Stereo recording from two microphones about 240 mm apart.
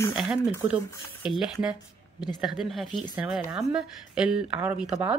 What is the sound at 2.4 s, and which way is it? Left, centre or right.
Speech, centre.